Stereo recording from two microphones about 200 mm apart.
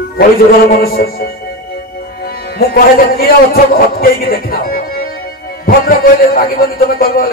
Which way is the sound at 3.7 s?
45° left (ahead or behind).